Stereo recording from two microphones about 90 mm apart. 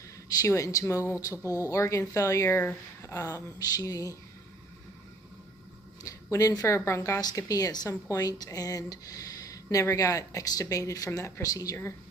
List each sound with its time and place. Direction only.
0.4 s speech: 35° left (ahead or behind)
6.0 s a woman's voice: 40° left (ahead or behind)
7.2 s a woman's voice: 45° left (ahead or behind)